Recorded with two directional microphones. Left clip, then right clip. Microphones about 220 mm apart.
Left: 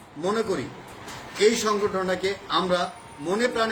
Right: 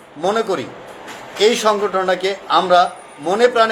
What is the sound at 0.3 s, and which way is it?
A man's voice, 10° left (ahead or behind).